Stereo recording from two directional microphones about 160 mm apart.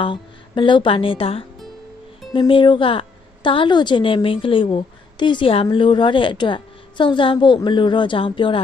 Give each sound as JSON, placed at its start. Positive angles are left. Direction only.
{"t": 0.0, "sound": "a woman's voice", "side_deg": 30}